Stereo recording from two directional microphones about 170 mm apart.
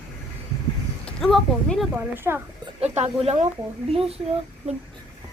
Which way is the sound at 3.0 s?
40° right (ahead or behind).